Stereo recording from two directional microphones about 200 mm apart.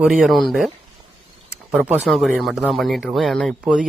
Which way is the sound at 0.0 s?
Centre (ahead or behind).